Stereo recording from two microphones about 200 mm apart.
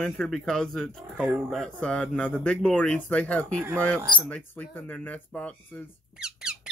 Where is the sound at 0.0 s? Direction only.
5° left (ahead or behind).